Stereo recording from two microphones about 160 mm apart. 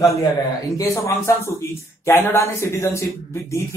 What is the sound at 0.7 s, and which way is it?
Speech, 20° left (ahead or behind).